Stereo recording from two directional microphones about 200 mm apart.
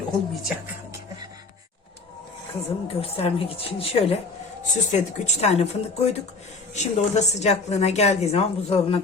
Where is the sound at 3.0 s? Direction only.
30° left (ahead or behind).